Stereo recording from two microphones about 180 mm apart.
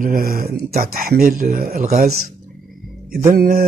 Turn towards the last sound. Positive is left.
turn(degrees=-55)  # may be behind; listen again after turning